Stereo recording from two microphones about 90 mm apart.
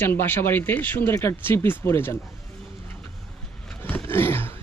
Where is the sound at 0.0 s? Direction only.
25° left (ahead or behind).